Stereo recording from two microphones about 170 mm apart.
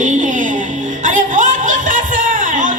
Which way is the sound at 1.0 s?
50° right (ahead or behind).